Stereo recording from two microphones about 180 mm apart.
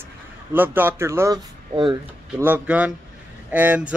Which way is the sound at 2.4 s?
10° right (ahead or behind).